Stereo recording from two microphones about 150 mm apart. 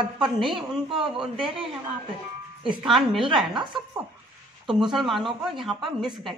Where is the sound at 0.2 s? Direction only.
Centre (ahead or behind).